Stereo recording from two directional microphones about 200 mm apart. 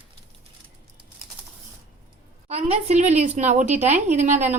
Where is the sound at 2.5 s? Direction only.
35° right (ahead or behind).